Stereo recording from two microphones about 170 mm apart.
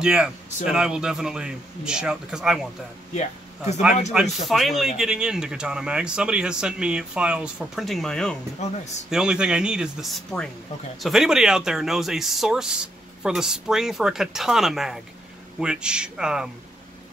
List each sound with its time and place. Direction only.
0.0 s speech: 5° right (ahead or behind)
3.2 s speech: 40° left (ahead or behind)
4.1 s speech: centre (ahead or behind)
8.6 s speech: 40° left (ahead or behind)
9.1 s speech: 5° right (ahead or behind)